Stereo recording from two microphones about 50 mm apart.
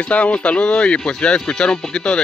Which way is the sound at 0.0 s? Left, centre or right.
Left.